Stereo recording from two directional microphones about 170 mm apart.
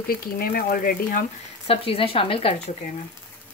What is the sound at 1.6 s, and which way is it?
Speech, 35° left (ahead or behind).